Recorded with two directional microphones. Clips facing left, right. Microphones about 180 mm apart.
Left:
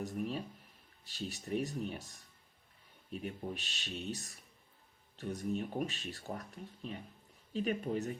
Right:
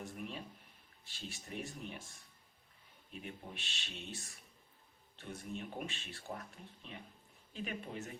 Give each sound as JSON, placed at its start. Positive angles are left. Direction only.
{"t": 0.0, "sound": "speech", "side_deg": 40}
{"t": 3.2, "sound": "speech", "side_deg": 40}